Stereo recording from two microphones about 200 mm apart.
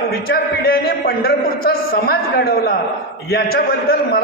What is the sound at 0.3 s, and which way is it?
A man's voice, 50° left (ahead or behind).